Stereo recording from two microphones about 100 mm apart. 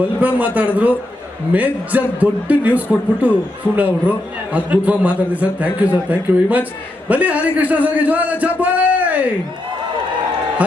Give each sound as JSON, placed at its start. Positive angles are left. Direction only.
{"t": 0.2, "sound": "a man's voice", "side_deg": -15}